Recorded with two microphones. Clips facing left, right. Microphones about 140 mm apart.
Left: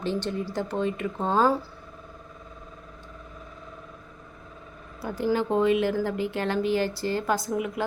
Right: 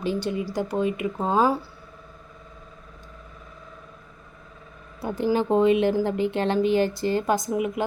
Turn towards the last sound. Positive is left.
turn(degrees=-20)  # may be behind; listen again after turning